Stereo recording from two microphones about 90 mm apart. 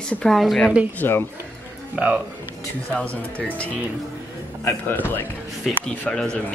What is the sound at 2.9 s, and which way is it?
Speech, 15° left (ahead or behind).